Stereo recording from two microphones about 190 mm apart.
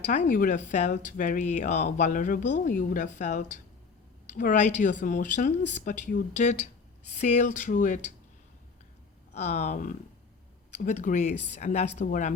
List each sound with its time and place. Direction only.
0.0 s speech: 40° left (ahead or behind)
9.3 s speech: 35° left (ahead or behind)